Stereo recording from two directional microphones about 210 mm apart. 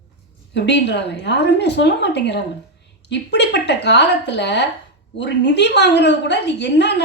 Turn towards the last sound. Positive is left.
turn(degrees=55)  # may be behind; listen again after turning